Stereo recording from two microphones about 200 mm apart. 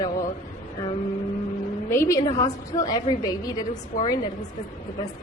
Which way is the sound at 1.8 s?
15° left (ahead or behind).